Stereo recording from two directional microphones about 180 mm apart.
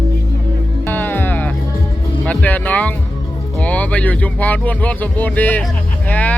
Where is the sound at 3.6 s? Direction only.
10° left (ahead or behind).